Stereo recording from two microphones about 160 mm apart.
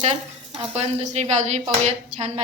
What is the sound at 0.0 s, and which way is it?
A woman's voice, 40° right (ahead or behind).